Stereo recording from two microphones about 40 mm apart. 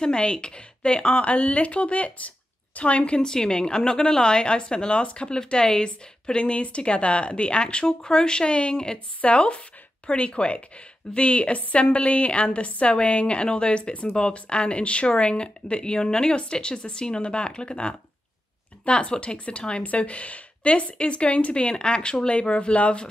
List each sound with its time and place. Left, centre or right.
0.0 s a woman's voice: left